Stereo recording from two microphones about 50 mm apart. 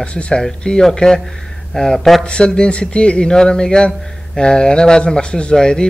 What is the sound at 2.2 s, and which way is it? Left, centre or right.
A man's voice, centre.